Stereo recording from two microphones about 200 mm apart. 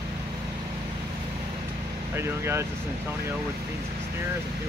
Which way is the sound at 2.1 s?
10° right (ahead or behind).